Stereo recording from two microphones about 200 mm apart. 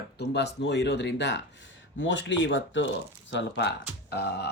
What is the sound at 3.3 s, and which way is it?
Speech, 55° left (ahead or behind).